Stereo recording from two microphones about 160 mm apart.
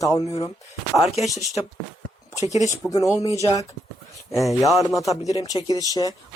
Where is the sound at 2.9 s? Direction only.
20° left (ahead or behind).